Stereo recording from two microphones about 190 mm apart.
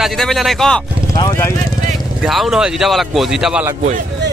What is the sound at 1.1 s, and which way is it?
Speech, 20° left (ahead or behind).